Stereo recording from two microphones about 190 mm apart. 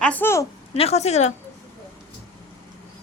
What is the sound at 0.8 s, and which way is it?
Speech, 35° left (ahead or behind).